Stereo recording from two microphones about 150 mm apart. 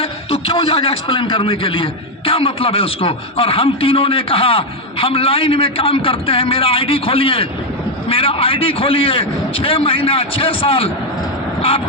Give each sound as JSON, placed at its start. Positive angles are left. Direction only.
{"t": 0.0, "sound": "a man's voice", "side_deg": 35}